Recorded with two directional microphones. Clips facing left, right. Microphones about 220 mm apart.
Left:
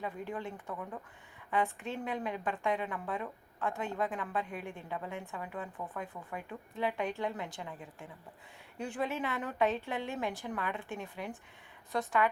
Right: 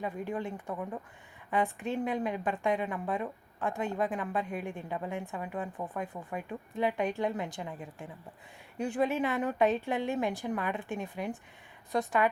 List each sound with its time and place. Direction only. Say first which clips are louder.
0.0 s a woman's voice: right 4 dB; 15° right (ahead or behind)
0.7 s speech: right 4 dB; 25° right (ahead or behind)
1.5 s a woman's voice: right 3 dB; 15° right (ahead or behind)